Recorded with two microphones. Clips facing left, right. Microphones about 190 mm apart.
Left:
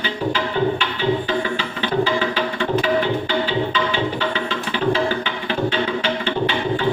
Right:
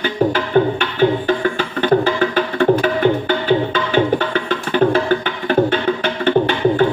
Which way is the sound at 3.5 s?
50° right (ahead or behind).